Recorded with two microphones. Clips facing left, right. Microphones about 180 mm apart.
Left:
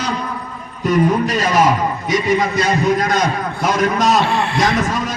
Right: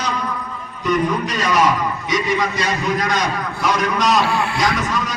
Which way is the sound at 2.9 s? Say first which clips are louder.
Left 3 dB; 50° left (ahead or behind).